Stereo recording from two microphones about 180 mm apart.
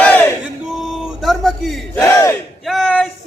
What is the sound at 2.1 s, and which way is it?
Battle cry, 15° left (ahead or behind).